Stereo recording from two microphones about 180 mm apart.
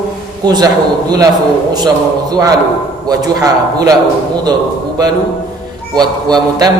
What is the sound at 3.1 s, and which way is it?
Speech, 20° right (ahead or behind).